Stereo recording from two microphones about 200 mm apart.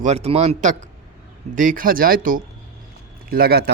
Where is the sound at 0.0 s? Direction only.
30° right (ahead or behind).